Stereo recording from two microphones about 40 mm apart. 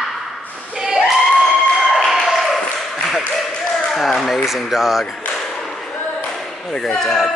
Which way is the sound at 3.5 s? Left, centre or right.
Left.